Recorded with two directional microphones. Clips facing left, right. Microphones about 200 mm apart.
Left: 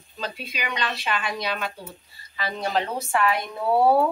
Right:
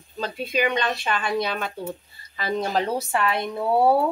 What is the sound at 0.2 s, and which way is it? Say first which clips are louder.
Speech: right 8 dB; 50° right (ahead or behind).